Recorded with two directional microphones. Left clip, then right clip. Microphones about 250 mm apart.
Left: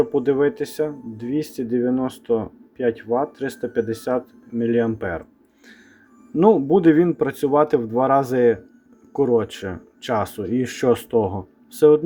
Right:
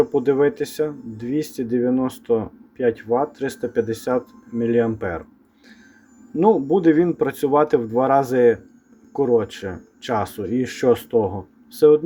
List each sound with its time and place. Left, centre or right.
0.0 s speech: centre
6.3 s speech: centre